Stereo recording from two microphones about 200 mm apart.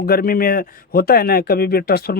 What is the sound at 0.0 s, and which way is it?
A man's voice, 50° left (ahead or behind).